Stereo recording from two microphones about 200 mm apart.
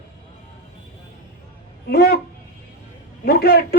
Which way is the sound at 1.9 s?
50° left (ahead or behind).